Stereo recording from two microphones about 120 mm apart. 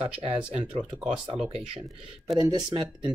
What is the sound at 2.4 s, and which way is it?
Speech, 35° right (ahead or behind).